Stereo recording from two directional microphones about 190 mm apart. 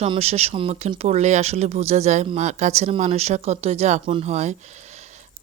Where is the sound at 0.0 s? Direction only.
35° right (ahead or behind).